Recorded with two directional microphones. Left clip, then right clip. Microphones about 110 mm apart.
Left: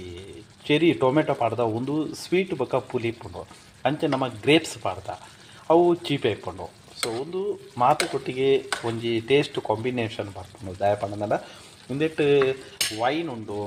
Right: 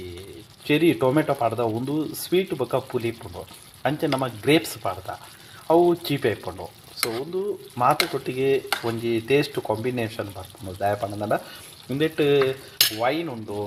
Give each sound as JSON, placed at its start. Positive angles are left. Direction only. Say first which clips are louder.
{"t": 0.7, "sound": "speech", "louder": "even", "side_deg": -15}
{"t": 7.9, "sound": "frying", "louder": "right 2 dB", "side_deg": -5}
{"t": 8.3, "sound": "speech", "louder": "left 3 dB", "side_deg": -15}